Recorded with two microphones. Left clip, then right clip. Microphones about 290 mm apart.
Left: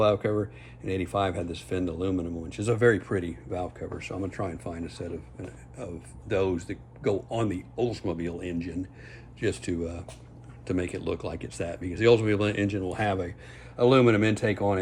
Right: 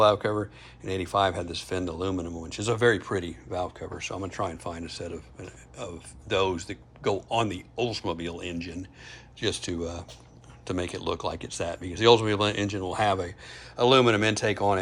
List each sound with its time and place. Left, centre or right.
0.0 s speech: centre